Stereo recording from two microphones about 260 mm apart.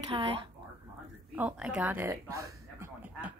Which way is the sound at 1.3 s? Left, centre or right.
Centre.